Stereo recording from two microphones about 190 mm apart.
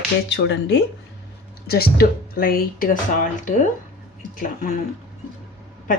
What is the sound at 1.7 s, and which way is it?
Speech, 55° left (ahead or behind).